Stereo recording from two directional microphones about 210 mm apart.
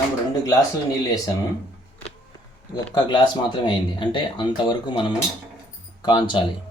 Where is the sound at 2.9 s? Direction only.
20° left (ahead or behind).